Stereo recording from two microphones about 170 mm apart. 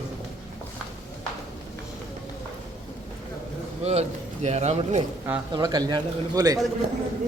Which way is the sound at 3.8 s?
40° right (ahead or behind).